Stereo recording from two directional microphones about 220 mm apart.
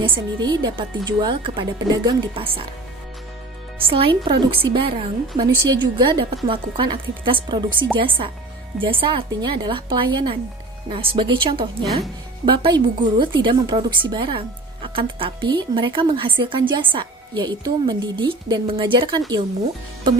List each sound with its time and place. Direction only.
0.0 s a woman's voice: 20° right (ahead or behind)
3.8 s a woman's voice: 25° right (ahead or behind)